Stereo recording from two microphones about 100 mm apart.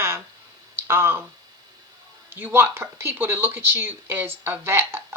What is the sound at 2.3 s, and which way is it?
Speech, 20° right (ahead or behind).